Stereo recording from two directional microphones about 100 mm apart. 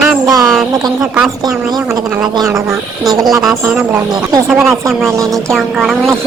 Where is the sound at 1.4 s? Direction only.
35° right (ahead or behind).